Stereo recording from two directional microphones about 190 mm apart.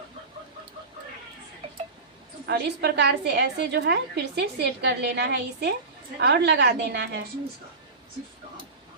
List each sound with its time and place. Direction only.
2.5 s a woman's voice: 60° right (ahead or behind)